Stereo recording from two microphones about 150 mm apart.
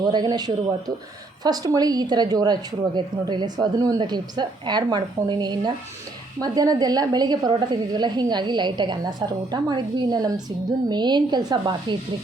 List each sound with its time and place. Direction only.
0.0 s speech: 30° right (ahead or behind)